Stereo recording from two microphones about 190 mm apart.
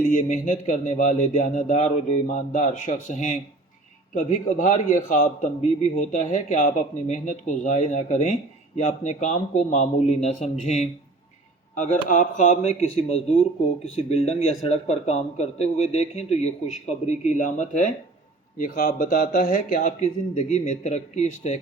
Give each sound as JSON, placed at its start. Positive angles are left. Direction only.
{"t": 0.1, "sound": "a man's voice", "side_deg": 40}